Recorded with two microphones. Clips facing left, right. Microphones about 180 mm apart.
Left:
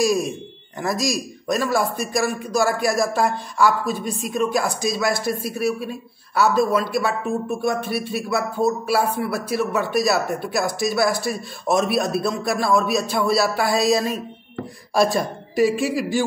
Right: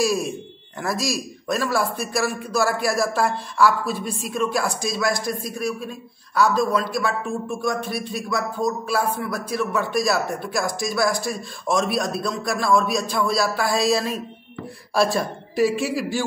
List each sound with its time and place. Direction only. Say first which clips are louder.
0.0 s a man's voice: left 2 dB; centre (ahead or behind)
8.8 s a man's voice: left 2 dB; 65° left (ahead or behind)
9.5 s a man's voice: left 1 dB; 5° left (ahead or behind)
15.0 s a man's voice: left 2 dB; centre (ahead or behind)